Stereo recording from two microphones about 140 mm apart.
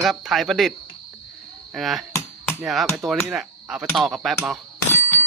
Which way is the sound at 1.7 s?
Centre (ahead or behind).